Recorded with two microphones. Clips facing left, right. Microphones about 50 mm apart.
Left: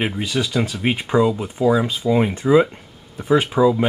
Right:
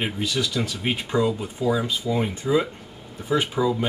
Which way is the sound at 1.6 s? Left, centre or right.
Left.